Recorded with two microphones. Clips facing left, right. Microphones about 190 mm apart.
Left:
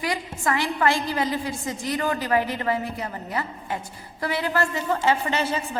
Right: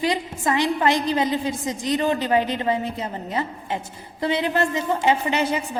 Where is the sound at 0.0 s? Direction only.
20° right (ahead or behind).